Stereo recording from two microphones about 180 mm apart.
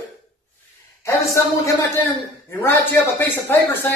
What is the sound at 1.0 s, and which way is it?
Speech, 15° left (ahead or behind).